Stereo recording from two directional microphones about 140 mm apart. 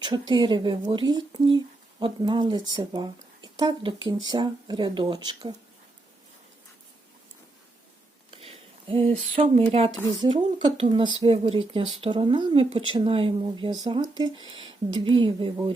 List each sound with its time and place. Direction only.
0.0 s speech: 30° right (ahead or behind)
8.3 s a sound: 45° right (ahead or behind)
9.6 s a woman's voice: 45° right (ahead or behind)